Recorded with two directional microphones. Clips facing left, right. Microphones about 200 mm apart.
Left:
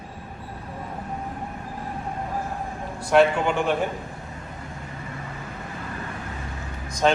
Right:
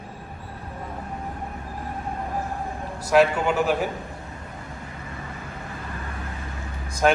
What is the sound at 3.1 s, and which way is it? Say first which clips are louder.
Speech: even; 5° right (ahead or behind).